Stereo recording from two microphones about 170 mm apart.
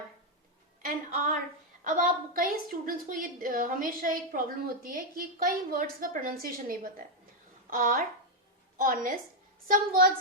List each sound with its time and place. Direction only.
1.8 s a woman's voice: 55° right (ahead or behind)